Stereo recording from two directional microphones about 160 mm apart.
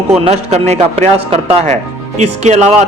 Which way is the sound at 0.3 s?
45° right (ahead or behind).